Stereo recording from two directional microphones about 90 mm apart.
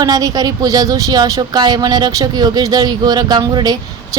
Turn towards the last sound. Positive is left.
turn(degrees=-50)  # may be behind; listen again after turning